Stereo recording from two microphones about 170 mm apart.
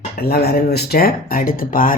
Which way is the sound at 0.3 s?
65° left (ahead or behind).